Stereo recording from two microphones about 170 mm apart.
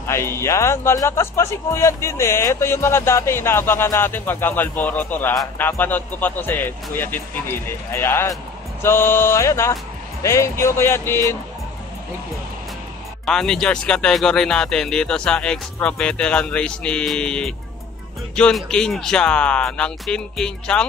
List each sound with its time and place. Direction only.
0.0 s speech: 15° left (ahead or behind)
13.2 s speech: 5° left (ahead or behind)